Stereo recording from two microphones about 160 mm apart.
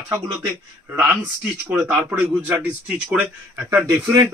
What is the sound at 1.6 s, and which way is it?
Speech, 10° right (ahead or behind).